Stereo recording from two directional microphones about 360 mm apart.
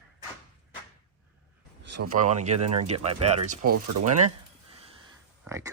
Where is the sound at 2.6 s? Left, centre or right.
Right.